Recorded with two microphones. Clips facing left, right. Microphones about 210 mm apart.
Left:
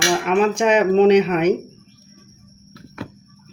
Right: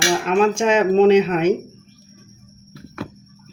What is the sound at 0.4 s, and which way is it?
Speech, 60° left (ahead or behind).